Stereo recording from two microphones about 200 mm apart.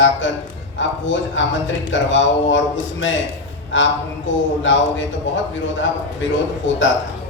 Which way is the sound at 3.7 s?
70° left (ahead or behind).